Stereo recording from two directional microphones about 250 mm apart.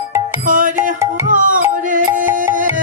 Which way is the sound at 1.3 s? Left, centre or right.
Right.